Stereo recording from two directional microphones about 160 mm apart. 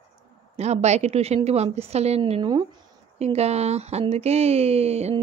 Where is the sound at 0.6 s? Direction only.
45° right (ahead or behind).